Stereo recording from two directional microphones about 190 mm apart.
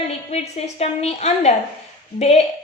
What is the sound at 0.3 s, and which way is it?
Speech, 35° left (ahead or behind).